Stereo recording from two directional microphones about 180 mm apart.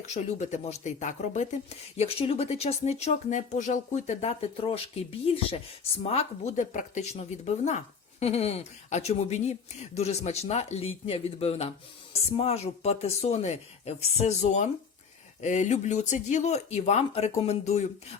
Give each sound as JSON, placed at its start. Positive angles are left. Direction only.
{"t": 0.0, "sound": "speech", "side_deg": 40}